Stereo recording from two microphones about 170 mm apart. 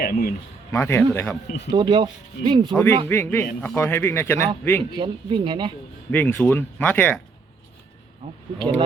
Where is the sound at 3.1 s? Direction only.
15° left (ahead or behind).